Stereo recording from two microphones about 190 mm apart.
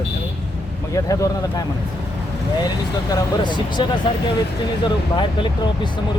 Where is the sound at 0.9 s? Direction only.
15° left (ahead or behind).